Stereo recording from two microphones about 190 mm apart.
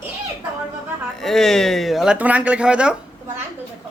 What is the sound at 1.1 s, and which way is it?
Speech, centre (ahead or behind).